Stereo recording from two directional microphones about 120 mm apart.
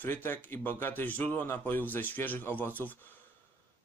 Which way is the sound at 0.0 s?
20° left (ahead or behind).